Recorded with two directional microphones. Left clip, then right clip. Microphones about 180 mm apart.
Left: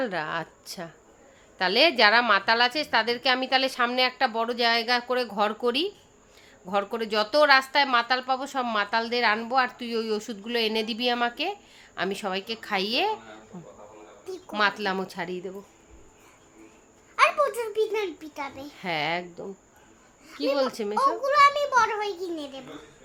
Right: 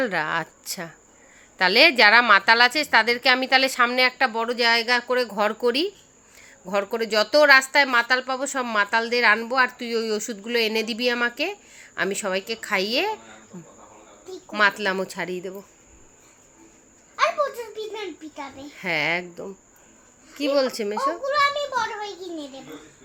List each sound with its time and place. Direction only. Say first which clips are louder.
0.0 s a woman's voice: right 5 dB; 10° right (ahead or behind)
17.2 s a child's voice: left 1 dB; 25° left (ahead or behind)
18.8 s a woman's voice: right 4 dB; centre (ahead or behind)
20.6 s a woman's voice: right 1 dB; centre (ahead or behind)
21.2 s a child's voice: left 3 dB; 30° left (ahead or behind)